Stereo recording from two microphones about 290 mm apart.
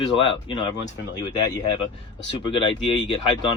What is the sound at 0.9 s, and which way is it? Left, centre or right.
Speech, left.